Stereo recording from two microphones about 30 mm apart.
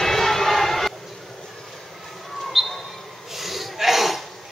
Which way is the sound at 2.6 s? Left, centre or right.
Centre.